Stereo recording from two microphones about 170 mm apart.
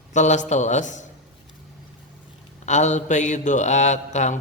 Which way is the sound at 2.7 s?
45° left (ahead or behind).